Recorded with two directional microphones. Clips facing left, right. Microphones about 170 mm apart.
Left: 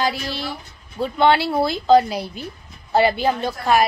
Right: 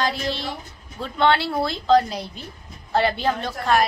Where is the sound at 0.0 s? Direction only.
5° left (ahead or behind).